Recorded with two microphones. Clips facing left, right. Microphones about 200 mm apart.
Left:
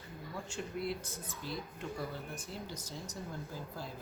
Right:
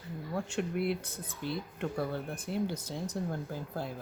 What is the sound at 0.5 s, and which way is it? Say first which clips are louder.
Speech: right 6 dB; 60° right (ahead or behind).